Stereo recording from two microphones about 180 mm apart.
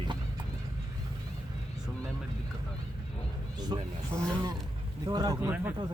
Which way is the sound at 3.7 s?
20° right (ahead or behind).